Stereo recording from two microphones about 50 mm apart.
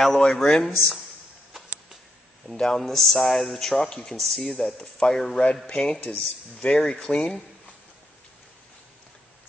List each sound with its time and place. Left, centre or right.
0.0 s speech: centre
2.5 s speech: centre
4.2 s speech: centre; by 7.2 s left